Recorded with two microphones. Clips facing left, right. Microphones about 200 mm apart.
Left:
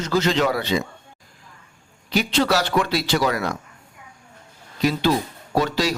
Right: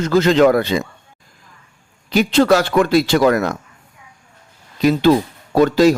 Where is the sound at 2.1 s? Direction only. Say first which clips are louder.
Right 7 dB; 50° right (ahead or behind).